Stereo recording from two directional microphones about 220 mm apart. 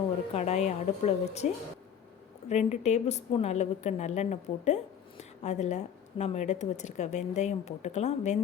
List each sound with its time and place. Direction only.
0.3 s a woman's voice: 30° left (ahead or behind)
2.5 s a woman's voice: 30° left (ahead or behind)